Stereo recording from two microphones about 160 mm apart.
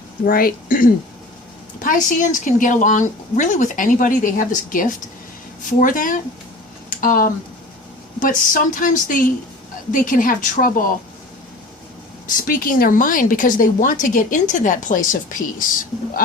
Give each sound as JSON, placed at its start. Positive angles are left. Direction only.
{"t": 0.3, "sound": "speech", "side_deg": 65}
{"t": 12.4, "sound": "speech", "side_deg": 60}